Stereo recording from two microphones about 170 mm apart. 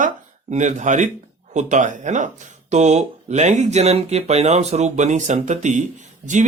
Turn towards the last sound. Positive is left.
turn(degrees=-45)  # may be behind; listen again after turning